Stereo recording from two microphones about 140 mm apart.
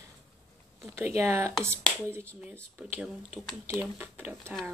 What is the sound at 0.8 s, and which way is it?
Speech, 15° right (ahead or behind).